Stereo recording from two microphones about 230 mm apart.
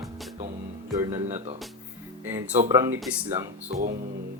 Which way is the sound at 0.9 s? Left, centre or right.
Centre.